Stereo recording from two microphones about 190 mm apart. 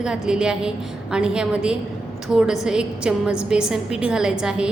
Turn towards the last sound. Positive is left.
turn(degrees=-5)  # may be behind; listen again after turning